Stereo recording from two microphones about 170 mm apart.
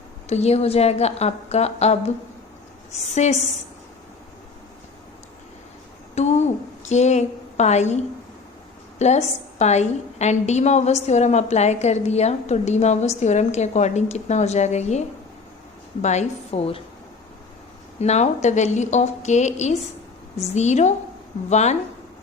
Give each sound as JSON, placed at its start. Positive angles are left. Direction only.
{"t": 0.3, "sound": "a woman's voice", "side_deg": 40}
{"t": 6.1, "sound": "a woman's voice", "side_deg": 40}
{"t": 18.0, "sound": "a woman's voice", "side_deg": 40}